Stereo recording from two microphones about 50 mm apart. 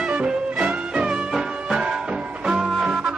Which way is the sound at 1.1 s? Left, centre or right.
Centre.